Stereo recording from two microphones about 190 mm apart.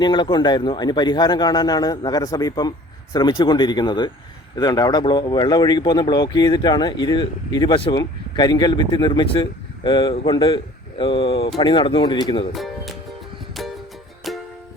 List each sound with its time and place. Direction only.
0.0 s speech: 25° left (ahead or behind)
12.5 s speech: centre (ahead or behind)
13.5 s music: centre (ahead or behind)